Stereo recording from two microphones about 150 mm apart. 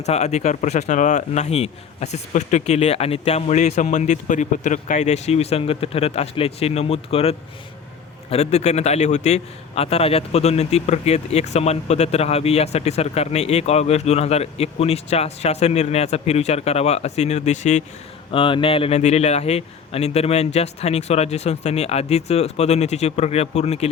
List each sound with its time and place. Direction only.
0.0 s a man's voice: 50° left (ahead or behind)
18.3 s a man's voice: 35° left (ahead or behind)